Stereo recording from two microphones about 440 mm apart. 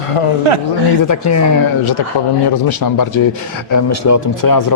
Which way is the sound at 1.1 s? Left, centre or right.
Left.